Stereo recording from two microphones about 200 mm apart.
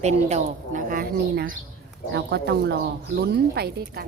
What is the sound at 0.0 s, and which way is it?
A woman's voice, 35° right (ahead or behind).